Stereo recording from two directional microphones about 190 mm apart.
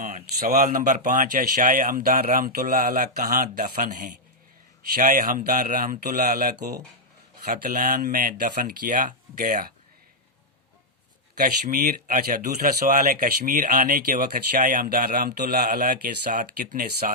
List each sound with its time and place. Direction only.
0.0 s speech: 40° right (ahead or behind)
7.4 s speech: 45° right (ahead or behind)
11.3 s speech: 50° right (ahead or behind)